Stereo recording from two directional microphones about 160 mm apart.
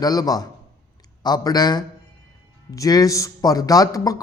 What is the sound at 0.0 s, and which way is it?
A man's voice, 25° left (ahead or behind).